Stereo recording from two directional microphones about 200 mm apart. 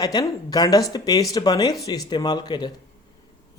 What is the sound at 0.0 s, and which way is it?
Speech, 20° left (ahead or behind).